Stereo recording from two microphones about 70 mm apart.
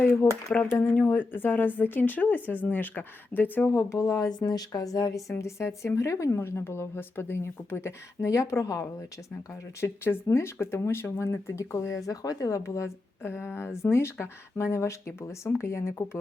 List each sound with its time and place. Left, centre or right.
0.0 s speech: left
0.5 s speech: left
3.8 s speech: left
4.3 s speech: left
4.7 s a woman's voice: left
9.5 s a woman's voice: left
12.0 s a woman's voice: left